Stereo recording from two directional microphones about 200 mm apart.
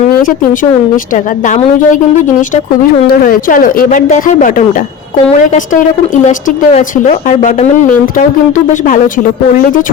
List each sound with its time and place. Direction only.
0.2 s speech: 45° left (ahead or behind)
3.1 s speech: 40° left (ahead or behind)
6.2 s speech: 35° left (ahead or behind)